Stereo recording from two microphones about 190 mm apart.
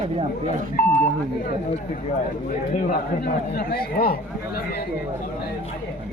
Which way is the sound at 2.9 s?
50° left (ahead or behind).